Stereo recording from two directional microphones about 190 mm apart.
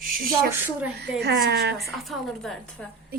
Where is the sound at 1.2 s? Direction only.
60° right (ahead or behind).